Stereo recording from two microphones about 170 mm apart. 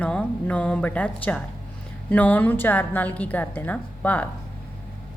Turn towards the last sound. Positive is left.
turn(degrees=10)  # may be behind; listen again after turning